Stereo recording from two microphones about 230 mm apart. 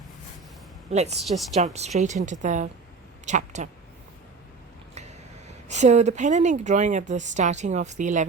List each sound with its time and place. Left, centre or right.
0.9 s a woman's voice: right
1.2 s a woman's voice: centre
1.5 s a woman's voice: right
4.9 s speech: right